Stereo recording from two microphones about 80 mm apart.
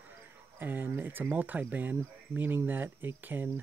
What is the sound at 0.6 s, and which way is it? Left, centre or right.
Speech, right.